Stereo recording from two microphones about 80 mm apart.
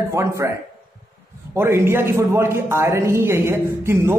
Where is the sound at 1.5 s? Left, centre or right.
Right.